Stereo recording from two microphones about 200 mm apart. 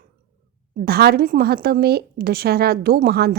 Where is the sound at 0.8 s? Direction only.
50° right (ahead or behind).